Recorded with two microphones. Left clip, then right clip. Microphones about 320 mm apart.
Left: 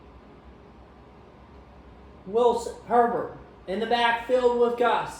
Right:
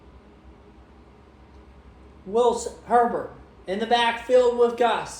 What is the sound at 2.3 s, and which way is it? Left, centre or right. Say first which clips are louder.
A man's voice: right 1 dB; right.